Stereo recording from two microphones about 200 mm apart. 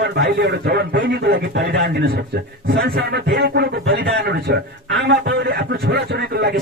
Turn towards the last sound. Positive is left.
turn(degrees=-55)  # may be behind; listen again after turning